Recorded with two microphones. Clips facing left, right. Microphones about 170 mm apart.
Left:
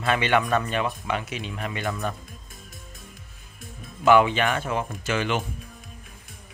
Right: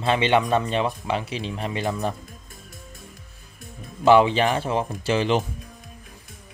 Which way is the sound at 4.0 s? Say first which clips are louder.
Right 2 dB; 30° right (ahead or behind).